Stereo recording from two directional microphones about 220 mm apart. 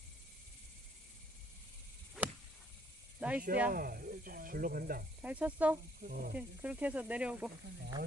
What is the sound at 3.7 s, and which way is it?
Speech, 40° right (ahead or behind).